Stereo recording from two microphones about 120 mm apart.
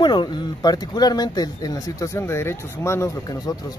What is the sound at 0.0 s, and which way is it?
Speech, 40° left (ahead or behind).